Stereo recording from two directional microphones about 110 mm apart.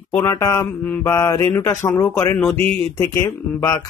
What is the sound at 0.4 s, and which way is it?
Speech, 30° left (ahead or behind).